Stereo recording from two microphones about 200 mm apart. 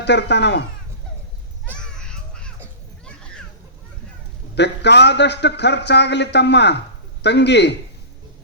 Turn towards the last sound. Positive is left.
turn(degrees=60)  # may be behind; listen again after turning